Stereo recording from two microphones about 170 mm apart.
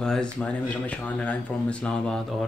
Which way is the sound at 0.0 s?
5° left (ahead or behind).